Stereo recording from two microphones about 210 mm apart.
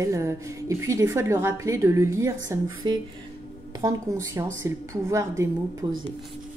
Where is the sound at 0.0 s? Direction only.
15° right (ahead or behind).